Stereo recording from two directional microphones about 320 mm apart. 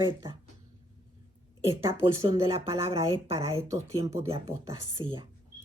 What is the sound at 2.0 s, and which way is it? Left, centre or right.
Speech, centre.